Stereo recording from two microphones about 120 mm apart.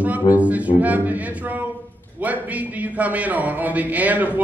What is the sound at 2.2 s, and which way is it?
A man's voice, 10° right (ahead or behind).